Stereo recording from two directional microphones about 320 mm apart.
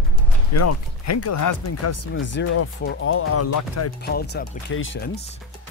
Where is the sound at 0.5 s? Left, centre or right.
Left.